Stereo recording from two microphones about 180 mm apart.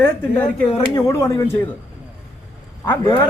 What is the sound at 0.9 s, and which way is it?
Speech, 20° left (ahead or behind).